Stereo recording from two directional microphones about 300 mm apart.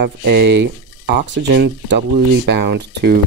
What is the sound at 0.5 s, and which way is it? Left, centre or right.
Speech, right.